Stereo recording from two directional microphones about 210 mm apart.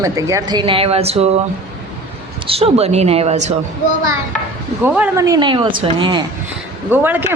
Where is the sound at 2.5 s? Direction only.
30° right (ahead or behind).